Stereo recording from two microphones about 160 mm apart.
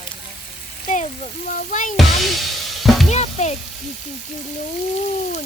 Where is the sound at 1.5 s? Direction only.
55° left (ahead or behind).